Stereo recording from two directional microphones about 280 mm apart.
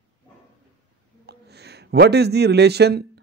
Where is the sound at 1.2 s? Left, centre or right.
Right.